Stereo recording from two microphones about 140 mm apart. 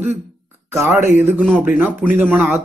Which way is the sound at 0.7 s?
15° right (ahead or behind).